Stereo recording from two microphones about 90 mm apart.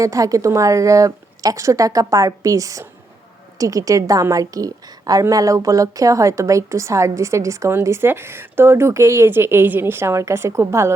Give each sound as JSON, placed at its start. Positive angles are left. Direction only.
{"t": 0.0, "sound": "a woman's voice", "side_deg": -40}